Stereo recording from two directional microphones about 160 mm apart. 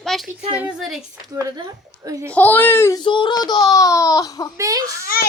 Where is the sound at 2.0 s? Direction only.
20° right (ahead or behind).